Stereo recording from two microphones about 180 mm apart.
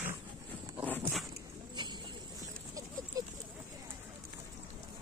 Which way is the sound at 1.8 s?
25° right (ahead or behind).